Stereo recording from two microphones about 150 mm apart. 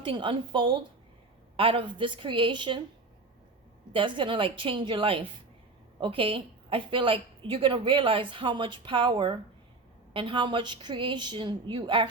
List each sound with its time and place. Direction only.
0.0 s a woman's voice: 35° right (ahead or behind)
3.9 s a woman's voice: 35° right (ahead or behind)